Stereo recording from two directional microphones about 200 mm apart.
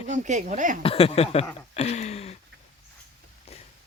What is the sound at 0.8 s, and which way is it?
Speech, 30° left (ahead or behind).